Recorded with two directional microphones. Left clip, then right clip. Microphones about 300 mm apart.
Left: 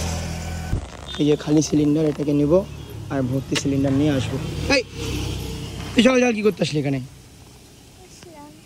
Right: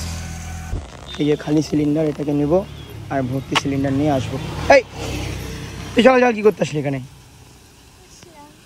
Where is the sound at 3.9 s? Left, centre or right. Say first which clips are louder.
Right 2 dB; centre.